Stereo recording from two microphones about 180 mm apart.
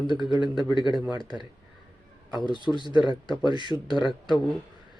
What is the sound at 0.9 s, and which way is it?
Speech, 20° right (ahead or behind).